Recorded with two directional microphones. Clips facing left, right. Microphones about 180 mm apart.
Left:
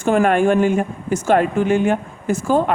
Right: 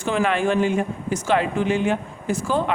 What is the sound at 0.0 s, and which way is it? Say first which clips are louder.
A woman's voice: left 6 dB; 50° left (ahead or behind).